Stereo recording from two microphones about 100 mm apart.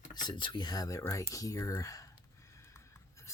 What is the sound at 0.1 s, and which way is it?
Speech, 50° left (ahead or behind).